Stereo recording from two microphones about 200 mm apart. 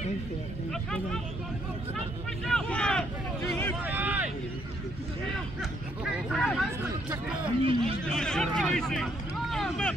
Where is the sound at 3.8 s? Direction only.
10° right (ahead or behind).